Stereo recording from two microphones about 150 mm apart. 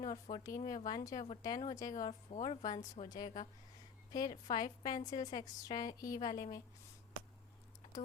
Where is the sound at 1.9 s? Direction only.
50° left (ahead or behind).